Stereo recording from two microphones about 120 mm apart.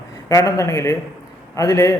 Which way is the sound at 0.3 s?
25° left (ahead or behind).